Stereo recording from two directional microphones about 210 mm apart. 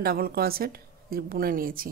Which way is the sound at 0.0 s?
45° right (ahead or behind).